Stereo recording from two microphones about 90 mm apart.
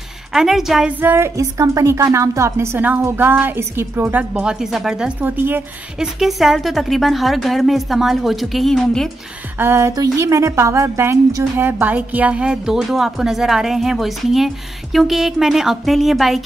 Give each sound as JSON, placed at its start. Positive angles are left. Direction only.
{"t": 0.3, "sound": "a woman's voice", "side_deg": -5}
{"t": 1.0, "sound": "a woman's voice", "side_deg": -30}
{"t": 5.2, "sound": "a woman's voice", "side_deg": -20}
{"t": 5.9, "sound": "a woman's voice", "side_deg": -5}
{"t": 9.6, "sound": "a woman's voice", "side_deg": -30}